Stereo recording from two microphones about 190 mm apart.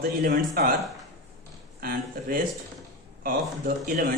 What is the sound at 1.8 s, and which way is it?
Speech, 50° right (ahead or behind).